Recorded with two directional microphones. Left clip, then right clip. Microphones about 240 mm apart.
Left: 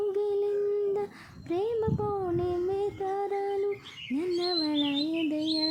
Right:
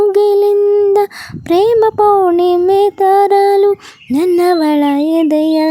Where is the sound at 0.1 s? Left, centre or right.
Right.